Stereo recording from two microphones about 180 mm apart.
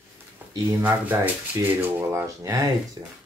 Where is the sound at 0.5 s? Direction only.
15° right (ahead or behind).